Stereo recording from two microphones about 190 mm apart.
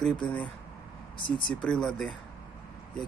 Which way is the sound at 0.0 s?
5° left (ahead or behind).